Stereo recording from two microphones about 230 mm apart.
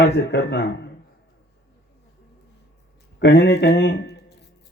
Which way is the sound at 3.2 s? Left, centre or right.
Left.